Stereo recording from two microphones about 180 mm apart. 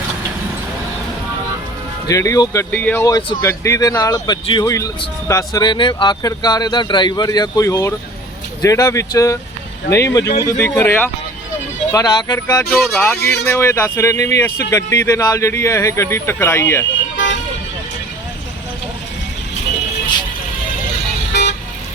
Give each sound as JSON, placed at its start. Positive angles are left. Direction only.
{"t": 2.0, "sound": "speech", "side_deg": 20}
{"t": 12.8, "sound": "speech", "side_deg": 5}
{"t": 13.1, "sound": "speech", "side_deg": 65}
{"t": 13.5, "sound": "speech", "side_deg": 15}